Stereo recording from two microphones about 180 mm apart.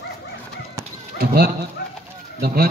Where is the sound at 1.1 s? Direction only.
60° right (ahead or behind).